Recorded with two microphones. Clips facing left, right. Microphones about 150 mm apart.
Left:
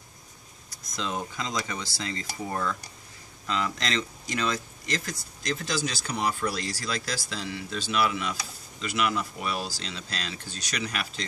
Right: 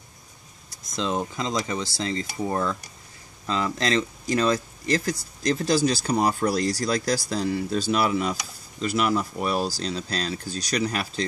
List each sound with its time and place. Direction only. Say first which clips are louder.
0.9 s speech: right 5 dB; 30° right (ahead or behind)